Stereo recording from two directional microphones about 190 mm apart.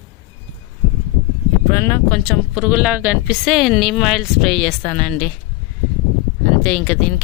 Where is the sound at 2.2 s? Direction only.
Centre (ahead or behind).